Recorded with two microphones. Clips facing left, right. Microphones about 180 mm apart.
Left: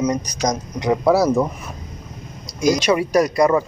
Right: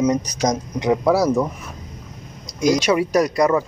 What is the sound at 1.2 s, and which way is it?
Speech, 10° left (ahead or behind).